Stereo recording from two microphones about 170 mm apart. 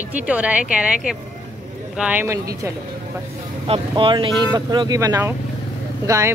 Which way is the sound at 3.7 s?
30° right (ahead or behind).